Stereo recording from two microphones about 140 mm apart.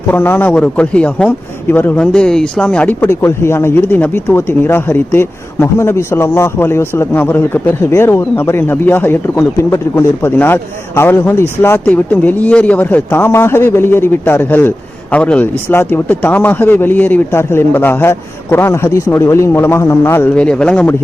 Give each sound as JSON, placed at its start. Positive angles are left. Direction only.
{"t": 0.1, "sound": "speech", "side_deg": 15}